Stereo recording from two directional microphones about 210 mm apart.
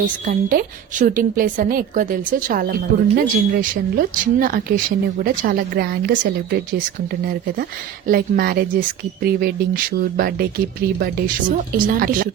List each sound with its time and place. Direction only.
0.3 s a woman's voice: 40° right (ahead or behind)